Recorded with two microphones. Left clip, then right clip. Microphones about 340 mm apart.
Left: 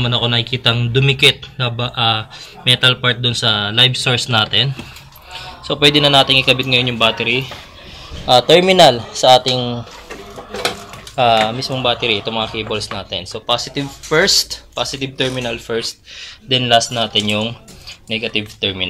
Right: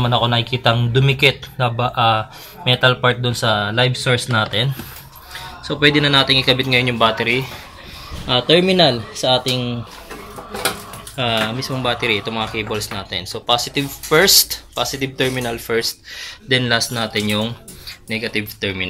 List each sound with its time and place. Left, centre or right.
0.0 s speech: centre
8.3 s speech: centre
9.5 s speech: left
11.1 s speech: centre